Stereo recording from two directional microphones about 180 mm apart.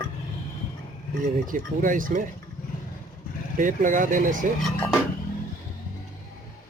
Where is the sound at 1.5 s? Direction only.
45° right (ahead or behind).